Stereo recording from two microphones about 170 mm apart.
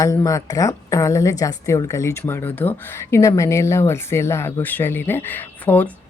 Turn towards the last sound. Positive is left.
turn(degrees=10)  # may be behind; listen again after turning